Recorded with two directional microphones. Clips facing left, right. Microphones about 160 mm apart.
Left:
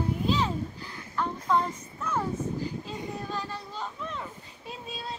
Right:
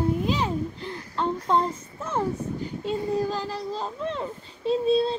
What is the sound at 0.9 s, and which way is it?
A child's voice, 30° right (ahead or behind).